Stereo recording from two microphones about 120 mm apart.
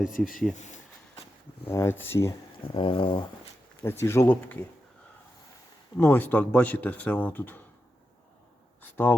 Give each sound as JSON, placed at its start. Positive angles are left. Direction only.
{"t": 0.0, "sound": "speech", "side_deg": 0}
{"t": 0.5, "sound": "speech", "side_deg": 85}
{"t": 1.6, "sound": "speech", "side_deg": 20}
{"t": 2.6, "sound": "a sound", "side_deg": 45}
{"t": 3.8, "sound": "speech", "side_deg": 20}
{"t": 6.0, "sound": "speech", "side_deg": 20}
{"t": 8.8, "sound": "speech", "side_deg": 15}